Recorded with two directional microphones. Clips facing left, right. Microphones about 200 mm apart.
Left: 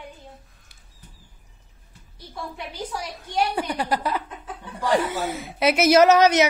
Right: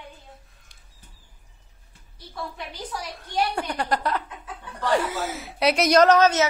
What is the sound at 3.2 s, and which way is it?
A woman's voice, 5° left (ahead or behind).